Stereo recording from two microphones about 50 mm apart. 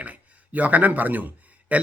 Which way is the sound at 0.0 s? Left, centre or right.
Right.